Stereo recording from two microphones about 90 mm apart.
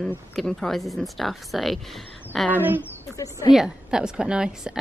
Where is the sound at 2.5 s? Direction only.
20° right (ahead or behind).